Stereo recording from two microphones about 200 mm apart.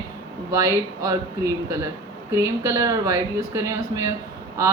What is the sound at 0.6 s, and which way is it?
Speech, 15° right (ahead or behind).